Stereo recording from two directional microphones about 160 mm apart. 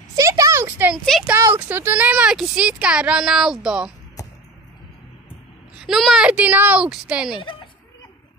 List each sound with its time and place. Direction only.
0.1 s a sound: 20° right (ahead or behind)
1.2 s speech: 10° right (ahead or behind)
5.8 s speech: centre (ahead or behind)
7.3 s speech: 30° left (ahead or behind)